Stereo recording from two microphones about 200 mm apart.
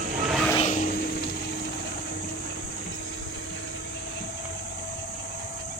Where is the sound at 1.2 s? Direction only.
55° left (ahead or behind).